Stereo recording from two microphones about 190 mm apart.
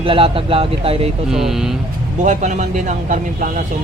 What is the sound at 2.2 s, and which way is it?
Speech, 40° right (ahead or behind).